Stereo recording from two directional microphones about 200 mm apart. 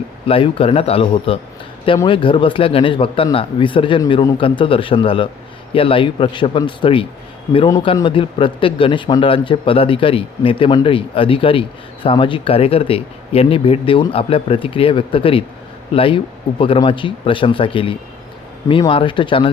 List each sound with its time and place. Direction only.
0.3 s speech: 25° left (ahead or behind)